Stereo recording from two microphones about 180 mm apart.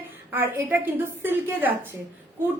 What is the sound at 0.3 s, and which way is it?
A woman's voice, 10° right (ahead or behind).